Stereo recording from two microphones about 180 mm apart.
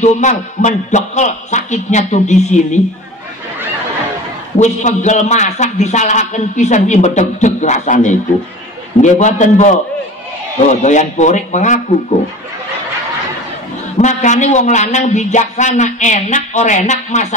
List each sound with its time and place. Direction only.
0.0 s a man's voice: 40° left (ahead or behind)
4.6 s a man's voice: 40° left (ahead or behind)
10.7 s a man's voice: 40° left (ahead or behind)
13.9 s a man's voice: 40° left (ahead or behind)